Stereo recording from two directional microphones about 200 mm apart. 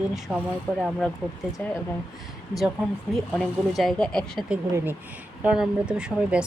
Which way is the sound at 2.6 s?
Centre (ahead or behind).